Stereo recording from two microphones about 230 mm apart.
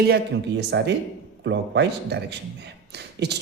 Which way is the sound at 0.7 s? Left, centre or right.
Right.